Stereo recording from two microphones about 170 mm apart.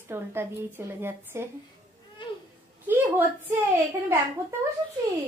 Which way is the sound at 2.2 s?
30° left (ahead or behind).